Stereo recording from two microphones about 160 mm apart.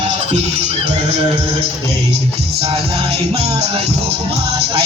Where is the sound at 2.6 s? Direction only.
40° right (ahead or behind).